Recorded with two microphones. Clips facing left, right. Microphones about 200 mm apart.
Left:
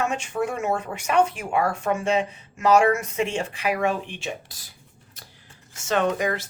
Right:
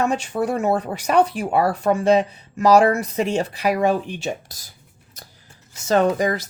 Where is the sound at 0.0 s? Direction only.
35° right (ahead or behind).